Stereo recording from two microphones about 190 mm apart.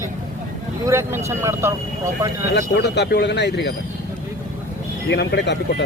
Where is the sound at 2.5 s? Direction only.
60° left (ahead or behind).